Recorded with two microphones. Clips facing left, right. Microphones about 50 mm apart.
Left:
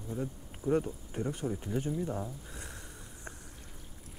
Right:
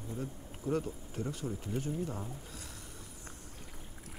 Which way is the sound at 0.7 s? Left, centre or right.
Centre.